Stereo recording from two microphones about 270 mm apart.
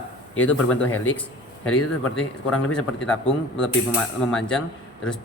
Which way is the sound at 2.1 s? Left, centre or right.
Centre.